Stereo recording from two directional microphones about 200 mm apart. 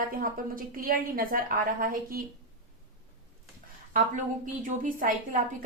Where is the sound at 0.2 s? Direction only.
45° right (ahead or behind).